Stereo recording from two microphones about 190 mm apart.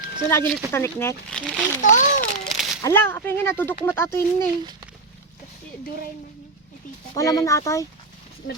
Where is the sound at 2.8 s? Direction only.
15° left (ahead or behind).